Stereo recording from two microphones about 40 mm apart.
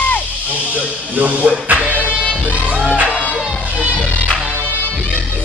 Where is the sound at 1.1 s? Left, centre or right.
Right.